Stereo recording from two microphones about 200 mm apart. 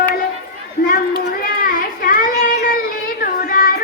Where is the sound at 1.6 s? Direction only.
45° left (ahead or behind).